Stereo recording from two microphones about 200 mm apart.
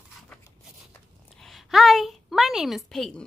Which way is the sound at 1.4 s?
Centre (ahead or behind).